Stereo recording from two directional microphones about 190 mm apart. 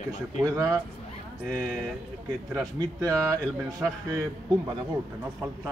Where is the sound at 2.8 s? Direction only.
20° right (ahead or behind).